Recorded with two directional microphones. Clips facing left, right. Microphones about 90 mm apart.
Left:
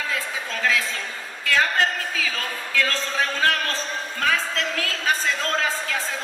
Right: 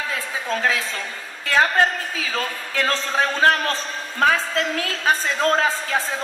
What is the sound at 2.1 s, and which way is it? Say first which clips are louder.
A woman's voice: right 2 dB; 35° right (ahead or behind).